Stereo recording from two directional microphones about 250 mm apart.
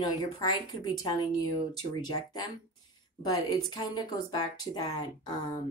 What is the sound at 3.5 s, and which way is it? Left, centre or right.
Speech, centre.